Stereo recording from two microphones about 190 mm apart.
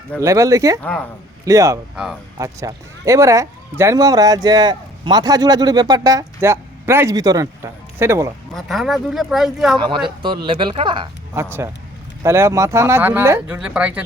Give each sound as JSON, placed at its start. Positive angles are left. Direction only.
{"t": 0.2, "sound": "speech", "side_deg": -15}
{"t": 0.8, "sound": "speech", "side_deg": 5}
{"t": 1.5, "sound": "speech", "side_deg": -15}
{"t": 8.5, "sound": "speech", "side_deg": 0}
{"t": 9.7, "sound": "speech", "side_deg": -25}
{"t": 11.3, "sound": "speech", "side_deg": -15}